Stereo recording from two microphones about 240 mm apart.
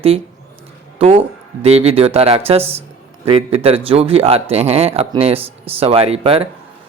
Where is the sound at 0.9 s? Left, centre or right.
Right.